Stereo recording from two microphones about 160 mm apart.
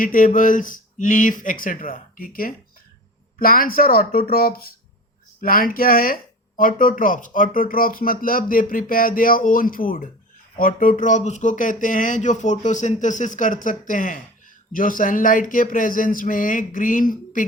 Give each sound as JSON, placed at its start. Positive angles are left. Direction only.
{"t": 0.0, "sound": "speech", "side_deg": 60}